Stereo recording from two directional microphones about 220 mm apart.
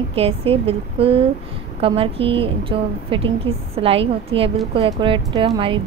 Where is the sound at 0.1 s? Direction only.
25° right (ahead or behind).